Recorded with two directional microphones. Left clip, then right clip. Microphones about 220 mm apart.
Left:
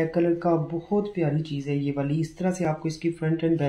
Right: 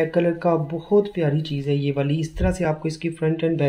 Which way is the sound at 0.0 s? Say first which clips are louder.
Right 3 dB; 50° right (ahead or behind).